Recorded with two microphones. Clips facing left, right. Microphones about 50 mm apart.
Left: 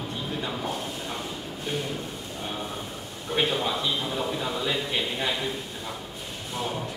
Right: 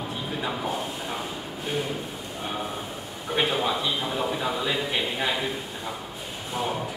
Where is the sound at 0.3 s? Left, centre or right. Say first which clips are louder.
Right 2 dB; centre.